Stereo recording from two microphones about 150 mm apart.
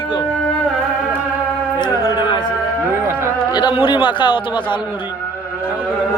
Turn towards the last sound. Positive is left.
turn(degrees=30)  # may be behind; listen again after turning